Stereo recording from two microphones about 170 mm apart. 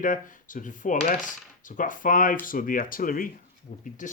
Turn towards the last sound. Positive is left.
turn(degrees=50)  # may be behind; listen again after turning